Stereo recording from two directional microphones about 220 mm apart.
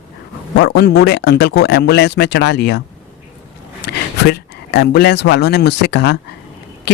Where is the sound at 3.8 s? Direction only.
50° left (ahead or behind).